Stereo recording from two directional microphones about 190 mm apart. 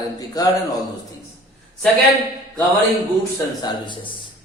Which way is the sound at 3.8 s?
25° left (ahead or behind).